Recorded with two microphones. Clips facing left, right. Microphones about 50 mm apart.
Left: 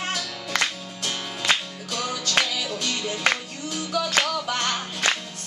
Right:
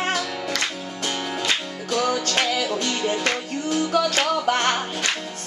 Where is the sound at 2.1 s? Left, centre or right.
Right.